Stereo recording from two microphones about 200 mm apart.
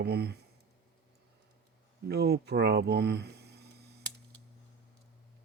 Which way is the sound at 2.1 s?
55° right (ahead or behind).